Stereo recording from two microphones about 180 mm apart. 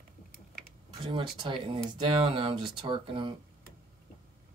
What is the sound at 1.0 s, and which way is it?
Speech, 25° right (ahead or behind).